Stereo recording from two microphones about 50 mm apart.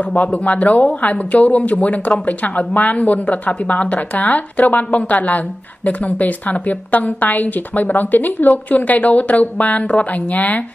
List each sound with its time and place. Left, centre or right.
0.0 s a woman's voice: left